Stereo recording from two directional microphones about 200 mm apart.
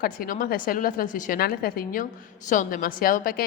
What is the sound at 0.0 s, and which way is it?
A woman's voice, 45° left (ahead or behind).